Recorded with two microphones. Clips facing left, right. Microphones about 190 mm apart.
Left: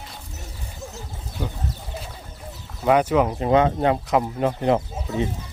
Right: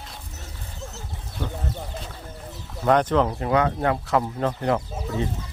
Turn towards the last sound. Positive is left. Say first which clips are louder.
# left 2 dB
turn(degrees=20)  # may be behind; listen again after turning